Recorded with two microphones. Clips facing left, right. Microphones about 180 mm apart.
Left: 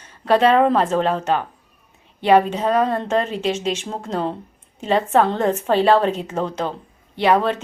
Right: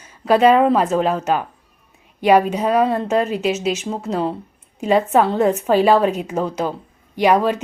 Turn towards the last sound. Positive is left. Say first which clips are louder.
# right 2 dB
turn(degrees=-10)  # may be behind; listen again after turning